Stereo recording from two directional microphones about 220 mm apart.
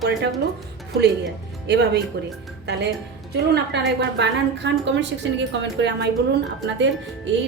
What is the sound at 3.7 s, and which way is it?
A woman's voice, 55° right (ahead or behind).